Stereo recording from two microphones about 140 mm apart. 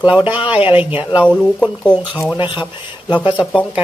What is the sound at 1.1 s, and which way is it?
Speech, 10° right (ahead or behind).